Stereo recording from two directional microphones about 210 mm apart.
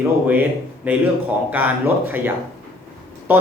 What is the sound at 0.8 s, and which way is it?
Speech, 5° right (ahead or behind).